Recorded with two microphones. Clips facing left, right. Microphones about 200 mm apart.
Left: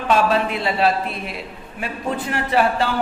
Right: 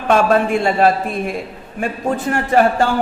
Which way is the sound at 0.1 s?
50° right (ahead or behind).